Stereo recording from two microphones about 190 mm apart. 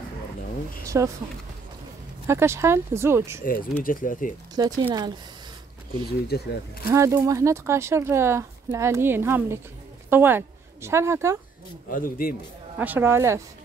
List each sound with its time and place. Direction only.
0.8 s speech: 15° right (ahead or behind)
2.2 s speech: 15° right (ahead or behind)
3.8 s speech: 45° left (ahead or behind)
4.6 s speech: 20° right (ahead or behind)
6.0 s speech: 55° left (ahead or behind)
6.9 s a woman's voice: 15° right (ahead or behind)
11.9 s speech: 50° left (ahead or behind)
12.7 s speech: 10° right (ahead or behind)